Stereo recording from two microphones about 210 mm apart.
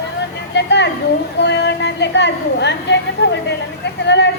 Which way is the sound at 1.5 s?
55° left (ahead or behind).